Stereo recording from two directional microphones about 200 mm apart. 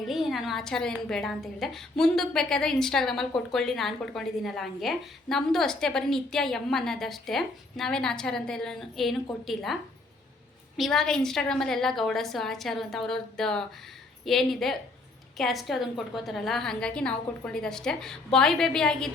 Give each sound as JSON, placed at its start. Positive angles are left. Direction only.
{"t": 0.1, "sound": "a woman's voice", "side_deg": 0}
{"t": 10.8, "sound": "a woman's voice", "side_deg": 0}